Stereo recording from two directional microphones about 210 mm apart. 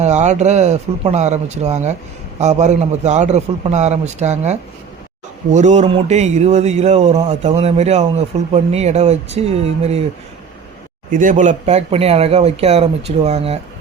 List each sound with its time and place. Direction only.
0.0 s speech: 35° right (ahead or behind)
11.1 s speech: 40° right (ahead or behind)